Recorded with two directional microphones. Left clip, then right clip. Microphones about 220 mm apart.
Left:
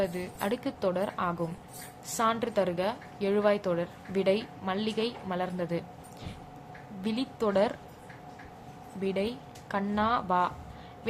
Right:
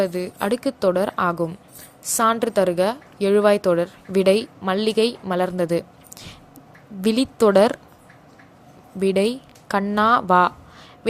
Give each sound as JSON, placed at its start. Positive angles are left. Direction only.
{"t": 0.0, "sound": "a woman's voice", "side_deg": -25}
{"t": 7.0, "sound": "a woman's voice", "side_deg": -35}
{"t": 9.0, "sound": "speech", "side_deg": -30}